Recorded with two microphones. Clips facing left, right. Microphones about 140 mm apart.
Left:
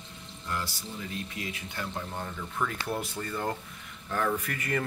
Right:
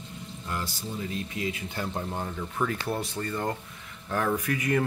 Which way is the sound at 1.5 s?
25° right (ahead or behind).